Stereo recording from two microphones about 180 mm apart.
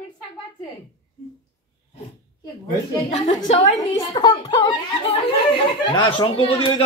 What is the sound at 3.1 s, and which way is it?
Speech, 40° left (ahead or behind).